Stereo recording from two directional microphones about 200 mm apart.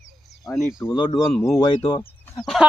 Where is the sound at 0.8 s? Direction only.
20° left (ahead or behind).